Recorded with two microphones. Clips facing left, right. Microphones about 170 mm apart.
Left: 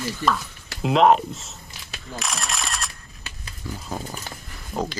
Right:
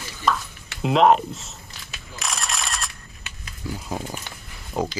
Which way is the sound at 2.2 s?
Centre (ahead or behind).